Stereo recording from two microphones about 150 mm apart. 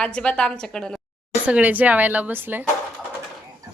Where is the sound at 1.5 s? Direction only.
10° right (ahead or behind).